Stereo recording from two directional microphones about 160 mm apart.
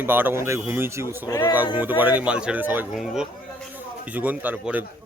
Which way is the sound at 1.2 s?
15° left (ahead or behind).